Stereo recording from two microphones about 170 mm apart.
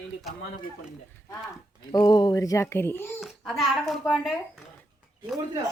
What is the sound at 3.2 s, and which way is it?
Speech, centre (ahead or behind).